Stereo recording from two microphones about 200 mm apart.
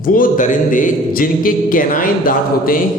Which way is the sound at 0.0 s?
45° left (ahead or behind).